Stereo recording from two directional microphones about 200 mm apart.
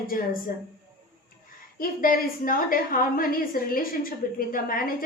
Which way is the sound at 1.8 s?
45° left (ahead or behind).